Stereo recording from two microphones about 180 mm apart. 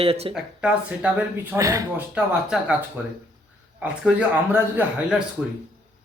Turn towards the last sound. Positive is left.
turn(degrees=-10)  # may be behind; listen again after turning